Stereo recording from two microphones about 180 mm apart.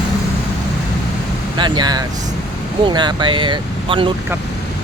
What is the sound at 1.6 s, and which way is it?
Speech, 25° right (ahead or behind).